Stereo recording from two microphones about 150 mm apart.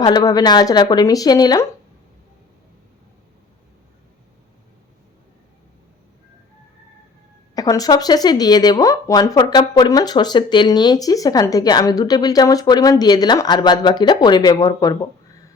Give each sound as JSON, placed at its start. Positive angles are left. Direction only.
{"t": 0.0, "sound": "speech", "side_deg": 25}
{"t": 7.5, "sound": "speech", "side_deg": 25}